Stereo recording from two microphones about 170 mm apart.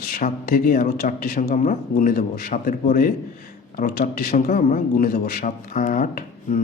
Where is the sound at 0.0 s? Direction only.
55° left (ahead or behind).